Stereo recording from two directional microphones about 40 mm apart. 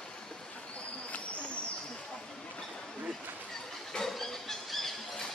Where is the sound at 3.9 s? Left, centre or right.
Centre.